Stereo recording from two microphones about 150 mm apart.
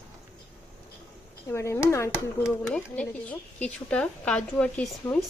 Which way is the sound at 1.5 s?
20° left (ahead or behind).